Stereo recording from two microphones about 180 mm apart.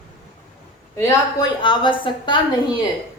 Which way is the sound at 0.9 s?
15° left (ahead or behind).